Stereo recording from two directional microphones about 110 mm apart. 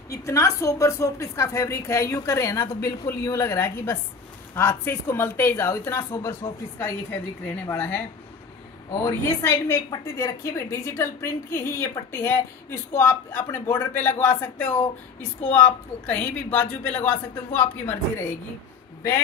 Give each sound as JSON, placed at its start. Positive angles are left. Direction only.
{"t": 0.1, "sound": "a woman's voice", "side_deg": 30}
{"t": 9.0, "sound": "a woman's voice", "side_deg": 25}